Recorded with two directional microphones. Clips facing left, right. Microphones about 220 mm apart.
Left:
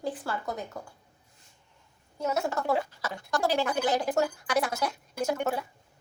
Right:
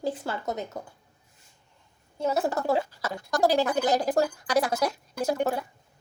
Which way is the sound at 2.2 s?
35° right (ahead or behind).